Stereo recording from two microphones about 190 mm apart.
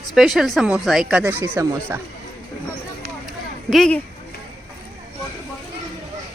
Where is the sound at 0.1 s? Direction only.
Centre (ahead or behind).